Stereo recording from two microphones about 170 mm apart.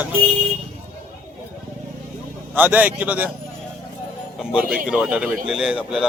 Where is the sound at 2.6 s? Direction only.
10° right (ahead or behind).